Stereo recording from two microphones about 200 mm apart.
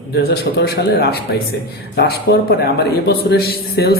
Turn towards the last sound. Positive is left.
turn(degrees=50)  # may be behind; listen again after turning